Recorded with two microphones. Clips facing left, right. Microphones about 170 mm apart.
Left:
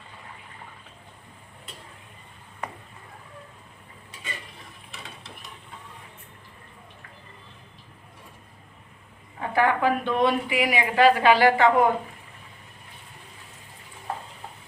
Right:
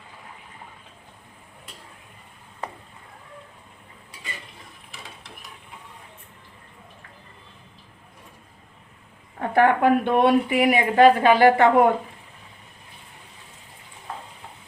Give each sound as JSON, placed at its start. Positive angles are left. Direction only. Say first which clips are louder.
{"t": 9.4, "sound": "a woman's voice", "louder": "right 4 dB", "side_deg": -55}